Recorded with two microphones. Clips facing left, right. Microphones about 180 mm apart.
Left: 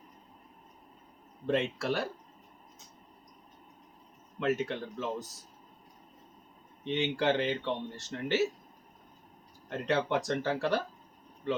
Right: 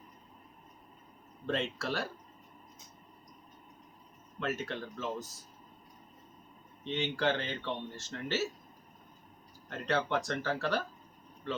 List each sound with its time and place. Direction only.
1.5 s speech: 15° left (ahead or behind)
4.4 s speech: 15° left (ahead or behind)
6.8 s speech: 15° left (ahead or behind)
9.6 s speech: 20° left (ahead or behind)